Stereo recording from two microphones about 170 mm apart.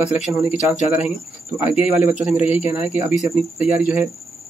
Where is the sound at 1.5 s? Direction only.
10° right (ahead or behind).